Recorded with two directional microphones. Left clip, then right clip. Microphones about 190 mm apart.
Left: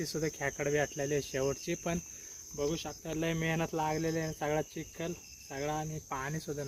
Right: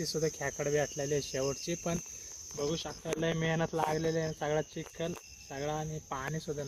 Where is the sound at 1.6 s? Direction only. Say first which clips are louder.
Even; 35° left (ahead or behind).